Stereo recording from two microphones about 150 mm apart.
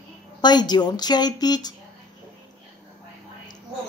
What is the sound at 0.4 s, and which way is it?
A woman's voice, 30° left (ahead or behind).